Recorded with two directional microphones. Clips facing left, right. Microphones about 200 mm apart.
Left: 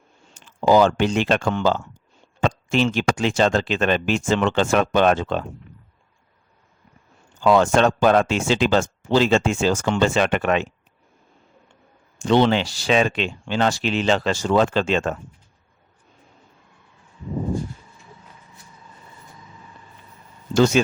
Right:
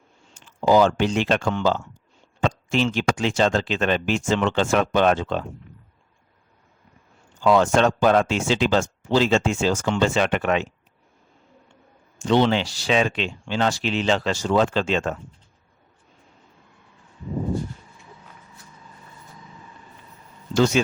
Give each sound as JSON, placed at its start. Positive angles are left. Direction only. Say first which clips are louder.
{"t": 0.3, "sound": "speech", "louder": "left 1 dB", "side_deg": 60}
{"t": 7.4, "sound": "speech", "louder": "left 1 dB", "side_deg": 60}
{"t": 12.2, "sound": "speech", "louder": "left 2 dB", "side_deg": 60}
{"t": 20.5, "sound": "speech", "louder": "left 2 dB", "side_deg": 50}